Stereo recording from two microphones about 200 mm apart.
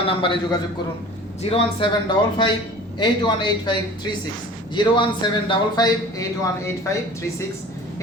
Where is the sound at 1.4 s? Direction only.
25° left (ahead or behind).